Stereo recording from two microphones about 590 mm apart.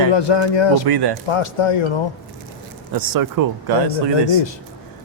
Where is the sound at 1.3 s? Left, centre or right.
Left.